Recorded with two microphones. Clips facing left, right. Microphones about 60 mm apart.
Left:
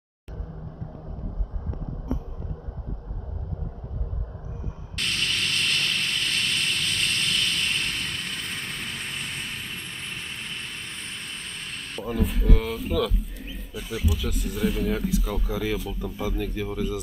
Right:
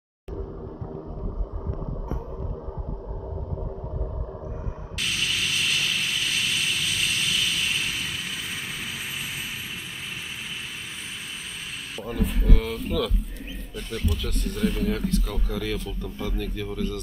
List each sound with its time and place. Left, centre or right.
4.9 s vehicle: centre
11.9 s speech: centre